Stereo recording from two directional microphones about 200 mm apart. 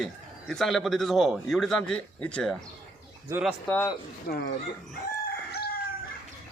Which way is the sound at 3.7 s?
10° left (ahead or behind).